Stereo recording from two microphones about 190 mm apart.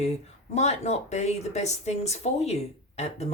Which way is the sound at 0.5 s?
35° left (ahead or behind).